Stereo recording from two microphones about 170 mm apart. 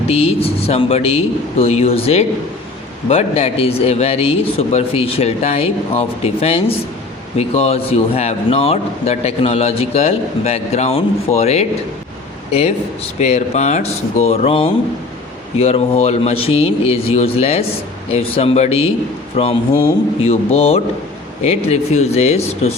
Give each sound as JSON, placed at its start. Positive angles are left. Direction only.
{"t": 0.1, "sound": "a man's voice", "side_deg": 35}